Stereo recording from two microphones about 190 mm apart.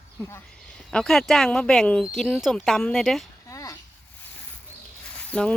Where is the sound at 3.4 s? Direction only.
15° left (ahead or behind).